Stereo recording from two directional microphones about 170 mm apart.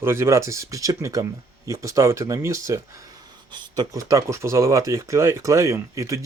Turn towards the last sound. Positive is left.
turn(degrees=-20)  # may be behind; listen again after turning